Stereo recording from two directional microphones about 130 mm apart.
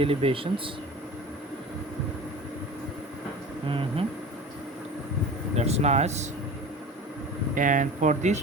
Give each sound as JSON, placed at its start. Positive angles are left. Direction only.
{"t": 0.0, "sound": "speech", "side_deg": -45}
{"t": 3.7, "sound": "speech", "side_deg": -45}
{"t": 5.5, "sound": "speech", "side_deg": -55}
{"t": 7.5, "sound": "speech", "side_deg": -80}